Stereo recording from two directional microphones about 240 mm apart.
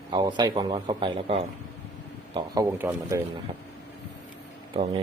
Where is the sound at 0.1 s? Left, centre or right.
Centre.